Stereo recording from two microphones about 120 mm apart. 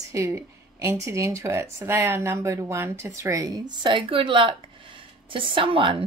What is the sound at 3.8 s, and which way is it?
A woman's voice, 40° right (ahead or behind).